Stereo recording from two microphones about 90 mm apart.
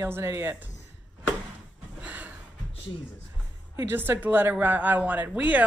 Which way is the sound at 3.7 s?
25° right (ahead or behind).